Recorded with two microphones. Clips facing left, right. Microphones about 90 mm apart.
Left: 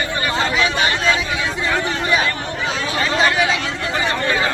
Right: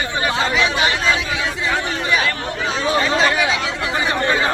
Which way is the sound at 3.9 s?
20° right (ahead or behind).